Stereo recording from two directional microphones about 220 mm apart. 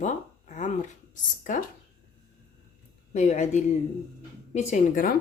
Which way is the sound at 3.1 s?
30° left (ahead or behind).